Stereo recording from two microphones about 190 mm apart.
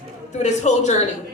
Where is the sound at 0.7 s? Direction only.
40° left (ahead or behind).